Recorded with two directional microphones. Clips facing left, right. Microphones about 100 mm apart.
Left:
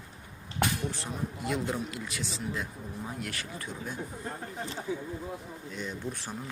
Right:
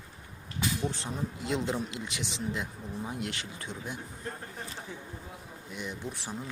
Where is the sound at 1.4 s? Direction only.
25° right (ahead or behind).